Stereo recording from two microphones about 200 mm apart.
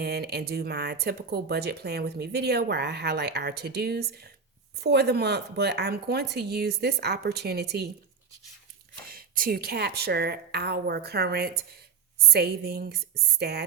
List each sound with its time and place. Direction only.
0.0 s speech: 55° right (ahead or behind)
9.0 s speech: 45° right (ahead or behind)